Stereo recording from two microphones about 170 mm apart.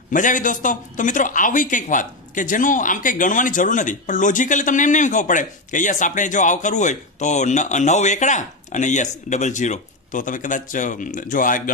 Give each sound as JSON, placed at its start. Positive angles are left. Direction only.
{"t": 0.1, "sound": "speech", "side_deg": 50}